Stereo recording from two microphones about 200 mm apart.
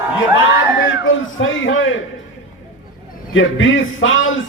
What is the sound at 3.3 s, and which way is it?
A man's voice, 75° left (ahead or behind).